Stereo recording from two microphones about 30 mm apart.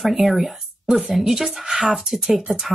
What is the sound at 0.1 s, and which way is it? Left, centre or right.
Speech, centre.